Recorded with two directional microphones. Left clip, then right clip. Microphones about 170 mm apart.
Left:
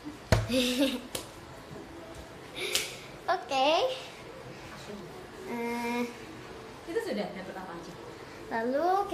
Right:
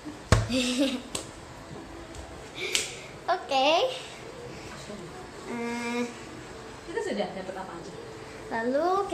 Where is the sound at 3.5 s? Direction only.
Centre (ahead or behind).